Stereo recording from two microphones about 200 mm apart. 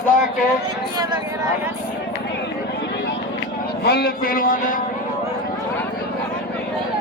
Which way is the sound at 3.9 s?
50° left (ahead or behind).